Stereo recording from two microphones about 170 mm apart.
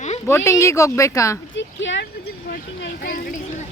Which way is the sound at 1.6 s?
90° left.